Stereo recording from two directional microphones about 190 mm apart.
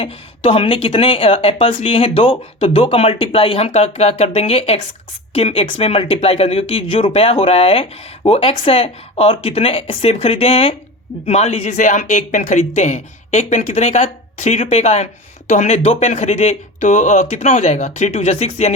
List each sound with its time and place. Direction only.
0.0 s speech: 30° left (ahead or behind)